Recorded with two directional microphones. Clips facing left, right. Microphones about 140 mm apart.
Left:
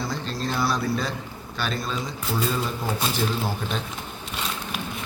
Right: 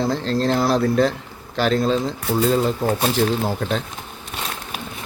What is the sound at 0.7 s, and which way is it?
Speech, 65° right (ahead or behind).